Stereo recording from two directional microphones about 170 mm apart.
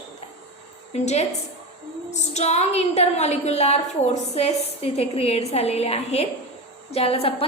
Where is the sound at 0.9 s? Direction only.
40° left (ahead or behind).